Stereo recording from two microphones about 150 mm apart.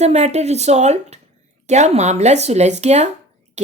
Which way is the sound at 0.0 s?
50° right (ahead or behind).